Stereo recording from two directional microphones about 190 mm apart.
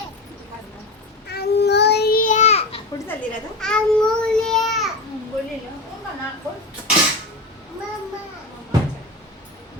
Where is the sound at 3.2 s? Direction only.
5° left (ahead or behind).